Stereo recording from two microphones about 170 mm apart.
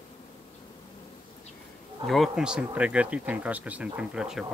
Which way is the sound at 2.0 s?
Centre (ahead or behind).